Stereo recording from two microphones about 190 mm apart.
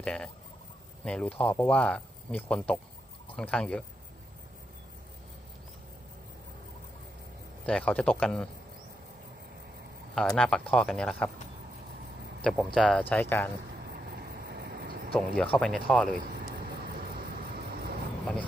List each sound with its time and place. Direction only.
0.0 s speech: 5° left (ahead or behind)
7.7 s speech: 5° left (ahead or behind)
10.2 s speech: 5° left (ahead or behind)
12.4 s speech: centre (ahead or behind)
14.2 s vehicle: 55° right (ahead or behind)
15.1 s speech: 5° left (ahead or behind)